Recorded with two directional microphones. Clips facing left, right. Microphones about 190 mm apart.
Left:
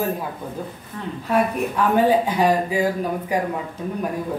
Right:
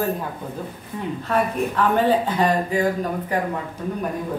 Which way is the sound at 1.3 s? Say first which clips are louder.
Left 2 dB; 10° left (ahead or behind).